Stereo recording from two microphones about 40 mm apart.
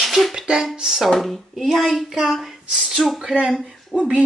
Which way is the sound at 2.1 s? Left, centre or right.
Centre.